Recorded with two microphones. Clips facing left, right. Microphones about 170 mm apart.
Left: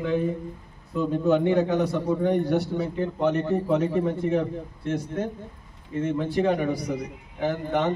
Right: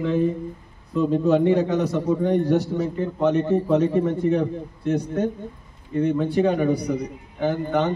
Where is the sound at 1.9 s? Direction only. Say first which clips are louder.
Right 3 dB; 15° right (ahead or behind).